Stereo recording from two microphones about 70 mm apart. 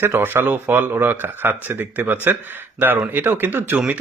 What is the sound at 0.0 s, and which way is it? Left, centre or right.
Speech, right.